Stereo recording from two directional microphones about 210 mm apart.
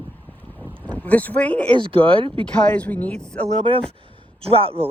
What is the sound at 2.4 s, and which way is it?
Speech, 5° left (ahead or behind).